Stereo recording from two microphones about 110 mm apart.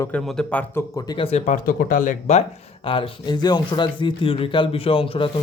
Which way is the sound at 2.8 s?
50° left (ahead or behind).